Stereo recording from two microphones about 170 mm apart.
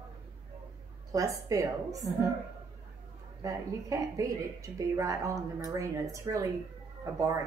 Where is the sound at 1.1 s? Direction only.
20° right (ahead or behind).